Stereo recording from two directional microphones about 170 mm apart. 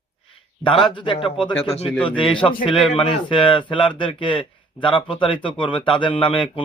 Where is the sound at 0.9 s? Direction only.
30° left (ahead or behind).